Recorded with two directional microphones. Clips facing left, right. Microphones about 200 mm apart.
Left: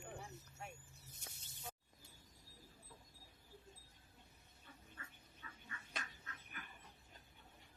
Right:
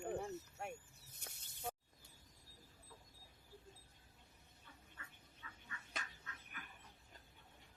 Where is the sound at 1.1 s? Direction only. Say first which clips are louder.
Right 2 dB; 60° right (ahead or behind).